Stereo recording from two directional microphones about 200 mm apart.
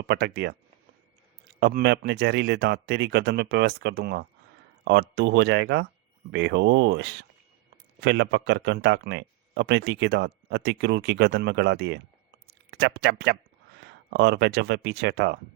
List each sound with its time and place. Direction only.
0.0 s speech: 50° right (ahead or behind)
1.5 s speech: 55° right (ahead or behind)